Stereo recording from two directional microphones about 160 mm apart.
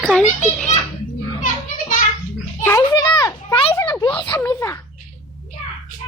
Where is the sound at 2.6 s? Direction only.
20° left (ahead or behind).